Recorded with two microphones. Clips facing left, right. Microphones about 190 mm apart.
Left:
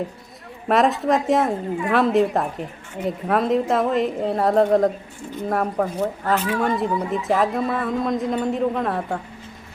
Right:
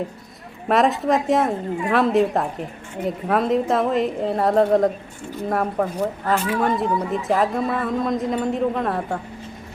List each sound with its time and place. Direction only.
0.7 s a woman's voice: centre (ahead or behind)